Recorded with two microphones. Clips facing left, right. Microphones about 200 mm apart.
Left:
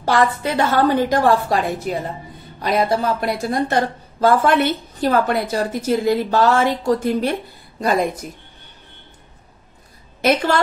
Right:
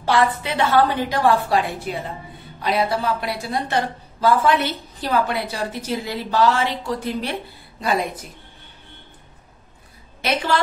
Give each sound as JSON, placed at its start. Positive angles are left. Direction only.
{"t": 0.0, "sound": "speech", "side_deg": 45}
{"t": 10.2, "sound": "speech", "side_deg": 50}